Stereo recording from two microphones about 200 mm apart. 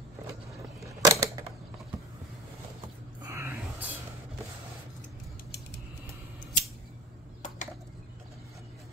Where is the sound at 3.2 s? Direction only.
15° right (ahead or behind).